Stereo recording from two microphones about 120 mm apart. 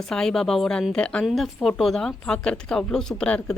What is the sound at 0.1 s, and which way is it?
Speech, 5° left (ahead or behind).